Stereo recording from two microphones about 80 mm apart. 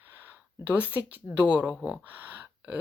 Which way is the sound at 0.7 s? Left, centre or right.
Right.